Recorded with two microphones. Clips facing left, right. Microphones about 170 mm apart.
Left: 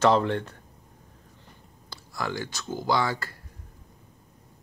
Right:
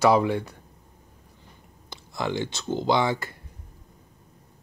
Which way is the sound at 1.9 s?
20° right (ahead or behind).